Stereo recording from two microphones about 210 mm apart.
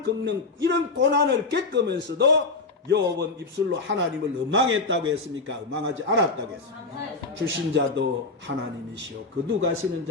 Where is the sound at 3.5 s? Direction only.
60° right (ahead or behind).